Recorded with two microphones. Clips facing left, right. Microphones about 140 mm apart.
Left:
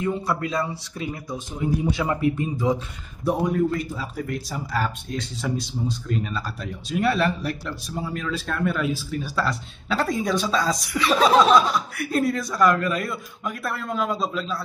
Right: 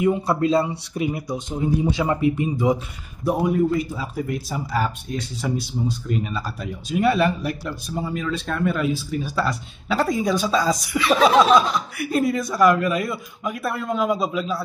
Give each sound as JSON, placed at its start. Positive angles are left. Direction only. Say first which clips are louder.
{"t": 0.0, "sound": "speech", "louder": "right 5 dB", "side_deg": -20}
{"t": 8.0, "sound": "speech", "louder": "right 3 dB", "side_deg": 0}